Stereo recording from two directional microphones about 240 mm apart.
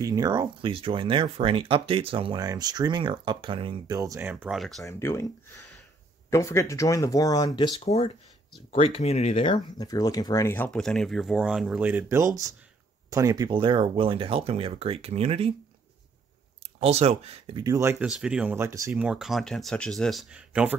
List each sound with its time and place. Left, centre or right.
0.0 s speech: centre
4.8 s speech: centre
6.3 s speech: centre; by 15.5 s right
16.8 s speech: right; by 20.7 s centre